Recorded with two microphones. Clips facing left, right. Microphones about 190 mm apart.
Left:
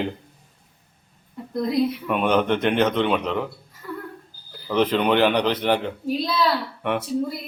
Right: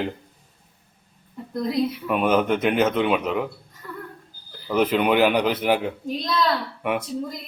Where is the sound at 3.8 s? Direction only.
5° left (ahead or behind).